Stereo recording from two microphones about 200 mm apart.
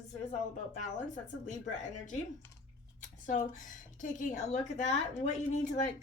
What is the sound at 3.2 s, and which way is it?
A woman's voice, 40° left (ahead or behind).